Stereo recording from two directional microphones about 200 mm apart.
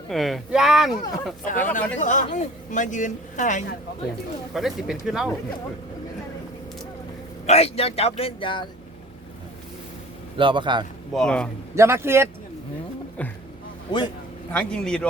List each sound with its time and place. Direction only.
0.1 s speech: centre (ahead or behind)
1.5 s a woman's voice: 40° left (ahead or behind)
4.5 s speech: centre (ahead or behind)
7.4 s a woman's voice: 30° left (ahead or behind)
10.3 s speech: 25° right (ahead or behind)
11.1 s speech: 5° left (ahead or behind)
11.7 s speech: 15° right (ahead or behind)
14.5 s speech: 5° left (ahead or behind)